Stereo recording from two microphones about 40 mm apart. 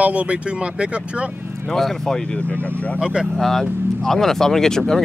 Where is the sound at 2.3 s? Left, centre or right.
Left.